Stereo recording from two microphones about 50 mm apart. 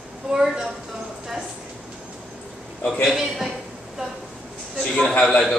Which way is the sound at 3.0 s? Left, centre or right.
Centre.